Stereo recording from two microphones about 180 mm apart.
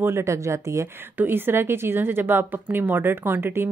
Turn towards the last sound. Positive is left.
turn(degrees=-10)  # may be behind; listen again after turning